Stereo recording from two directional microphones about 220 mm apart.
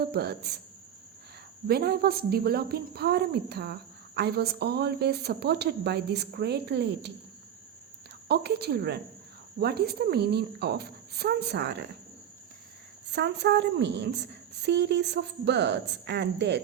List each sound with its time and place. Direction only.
0.0 s a woman's voice: 45° right (ahead or behind)
1.6 s a woman's voice: 45° right (ahead or behind)
8.3 s a woman's voice: 50° right (ahead or behind)
13.1 s a woman's voice: 50° right (ahead or behind)